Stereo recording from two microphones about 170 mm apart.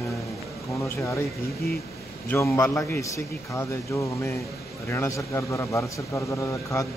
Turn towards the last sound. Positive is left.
turn(degrees=15)  # may be behind; listen again after turning